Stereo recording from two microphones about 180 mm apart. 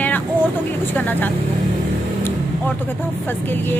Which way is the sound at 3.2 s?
10° left (ahead or behind).